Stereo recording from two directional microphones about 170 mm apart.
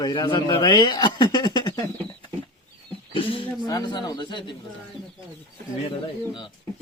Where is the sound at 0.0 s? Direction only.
25° left (ahead or behind).